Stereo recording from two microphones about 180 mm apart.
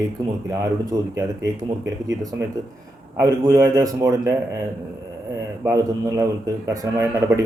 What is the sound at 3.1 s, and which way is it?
A man's voice, 15° right (ahead or behind).